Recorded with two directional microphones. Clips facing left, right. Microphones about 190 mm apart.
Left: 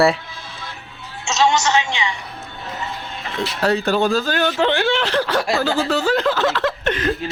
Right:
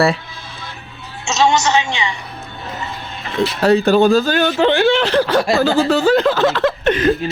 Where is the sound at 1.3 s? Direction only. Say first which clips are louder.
Right 2 dB; centre (ahead or behind).